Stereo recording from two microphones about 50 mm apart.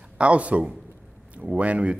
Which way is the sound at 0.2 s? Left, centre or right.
Right.